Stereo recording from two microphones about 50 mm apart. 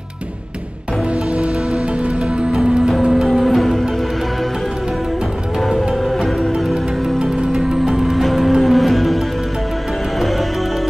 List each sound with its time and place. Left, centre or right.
2.5 s music: centre
5.7 s music: centre
7.2 s music: centre